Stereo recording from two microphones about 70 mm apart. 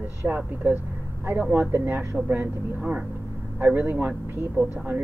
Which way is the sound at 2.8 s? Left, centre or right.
Centre.